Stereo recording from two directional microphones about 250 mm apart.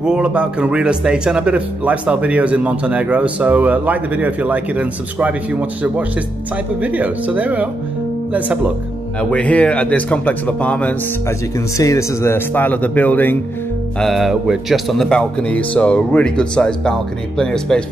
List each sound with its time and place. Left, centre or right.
0.0 s a man's voice: centre
9.2 s a man's voice: centre